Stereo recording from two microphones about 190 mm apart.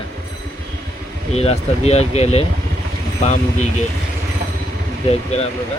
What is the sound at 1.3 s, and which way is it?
Speech, 35° left (ahead or behind).